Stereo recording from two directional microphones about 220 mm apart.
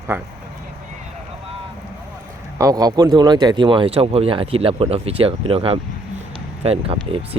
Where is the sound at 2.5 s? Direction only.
15° right (ahead or behind).